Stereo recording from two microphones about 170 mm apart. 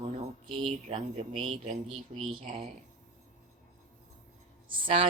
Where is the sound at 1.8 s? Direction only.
Centre (ahead or behind).